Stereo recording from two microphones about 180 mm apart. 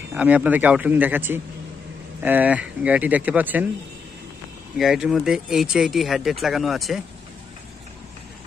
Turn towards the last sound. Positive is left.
turn(degrees=0)  # may be behind; listen again after turning